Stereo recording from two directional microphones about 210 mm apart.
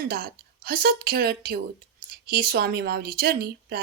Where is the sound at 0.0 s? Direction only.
45° right (ahead or behind).